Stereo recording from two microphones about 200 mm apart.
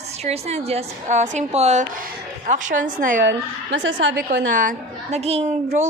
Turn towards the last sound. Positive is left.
turn(degrees=-35)  # may be behind; listen again after turning